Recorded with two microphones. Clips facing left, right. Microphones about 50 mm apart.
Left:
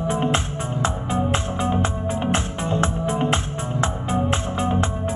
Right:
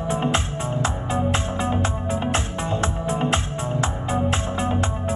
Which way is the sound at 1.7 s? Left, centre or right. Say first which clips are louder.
Left 1 dB; left.